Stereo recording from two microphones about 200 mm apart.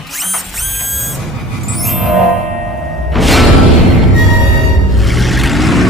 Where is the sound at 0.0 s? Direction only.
Centre (ahead or behind).